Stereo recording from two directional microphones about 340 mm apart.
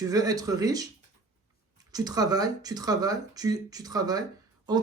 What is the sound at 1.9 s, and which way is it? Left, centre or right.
Speech, centre.